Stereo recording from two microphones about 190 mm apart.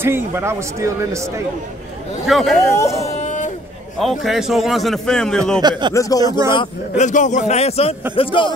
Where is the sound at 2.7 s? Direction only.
15° left (ahead or behind).